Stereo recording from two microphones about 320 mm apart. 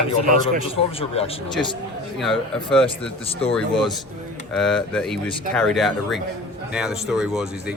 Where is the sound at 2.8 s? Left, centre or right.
Centre.